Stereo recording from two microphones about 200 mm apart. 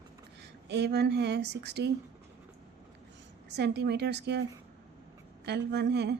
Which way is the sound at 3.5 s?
60° right (ahead or behind).